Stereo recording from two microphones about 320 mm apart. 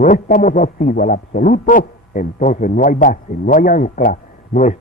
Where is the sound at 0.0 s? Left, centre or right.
Left.